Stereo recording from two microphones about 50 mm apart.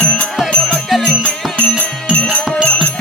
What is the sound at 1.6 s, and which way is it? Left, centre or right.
Music, left.